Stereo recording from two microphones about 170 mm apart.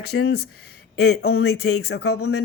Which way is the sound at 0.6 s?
70° left (ahead or behind).